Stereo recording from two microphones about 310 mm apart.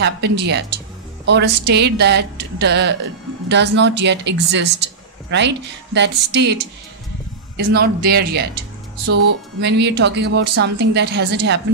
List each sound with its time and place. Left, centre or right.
0.0 s a woman's voice: right